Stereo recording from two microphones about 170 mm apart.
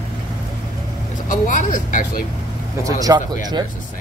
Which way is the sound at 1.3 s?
50° left (ahead or behind).